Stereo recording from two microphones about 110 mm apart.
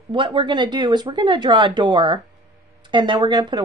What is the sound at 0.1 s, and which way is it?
A woman's voice, 50° right (ahead or behind).